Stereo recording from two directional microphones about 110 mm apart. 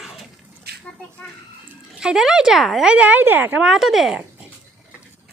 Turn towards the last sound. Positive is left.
turn(degrees=0)  # may be behind; listen again after turning